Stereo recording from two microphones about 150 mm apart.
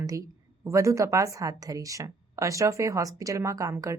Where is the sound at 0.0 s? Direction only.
20° right (ahead or behind).